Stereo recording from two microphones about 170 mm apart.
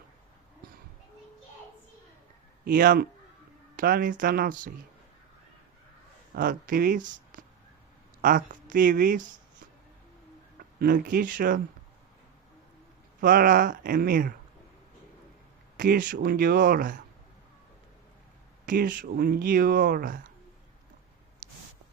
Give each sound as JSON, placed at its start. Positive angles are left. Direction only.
{"t": 2.6, "sound": "speech", "side_deg": -55}
{"t": 6.3, "sound": "speech", "side_deg": -55}
{"t": 10.8, "sound": "speech", "side_deg": -60}
{"t": 13.1, "sound": "speech", "side_deg": -55}
{"t": 15.8, "sound": "speech", "side_deg": -55}
{"t": 18.6, "sound": "speech", "side_deg": -55}